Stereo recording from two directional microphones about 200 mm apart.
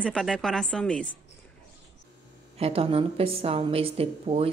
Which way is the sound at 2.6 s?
30° right (ahead or behind).